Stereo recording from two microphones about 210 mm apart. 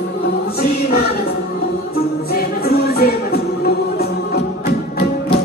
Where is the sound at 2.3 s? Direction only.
45° left (ahead or behind).